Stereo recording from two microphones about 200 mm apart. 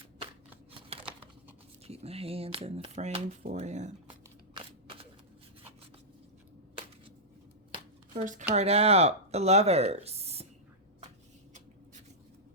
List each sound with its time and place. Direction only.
0.7 s crumpling: 25° right (ahead or behind)
1.9 s speech: 30° right (ahead or behind)
8.1 s speech: 40° right (ahead or behind)